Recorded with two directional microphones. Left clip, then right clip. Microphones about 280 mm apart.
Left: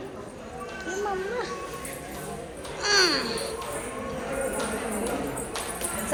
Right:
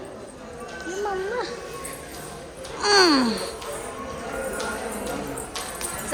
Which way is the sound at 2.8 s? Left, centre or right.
Right.